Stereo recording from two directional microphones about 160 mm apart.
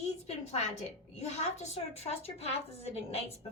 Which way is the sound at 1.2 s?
45° left (ahead or behind).